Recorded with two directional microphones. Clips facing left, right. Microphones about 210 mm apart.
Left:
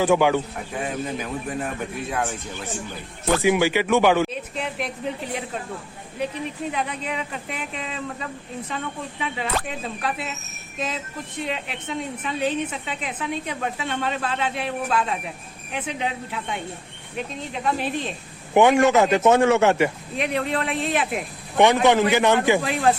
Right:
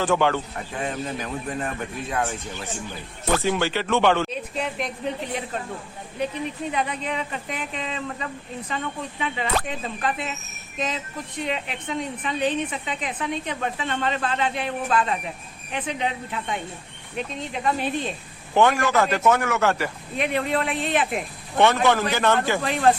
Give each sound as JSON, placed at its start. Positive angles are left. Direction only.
{"t": 0.0, "sound": "speech", "side_deg": 10}
{"t": 6.7, "sound": "a woman's voice", "side_deg": 0}
{"t": 18.5, "sound": "a man's voice", "side_deg": 20}
{"t": 20.1, "sound": "a woman's voice", "side_deg": 0}
{"t": 21.8, "sound": "speech", "side_deg": 15}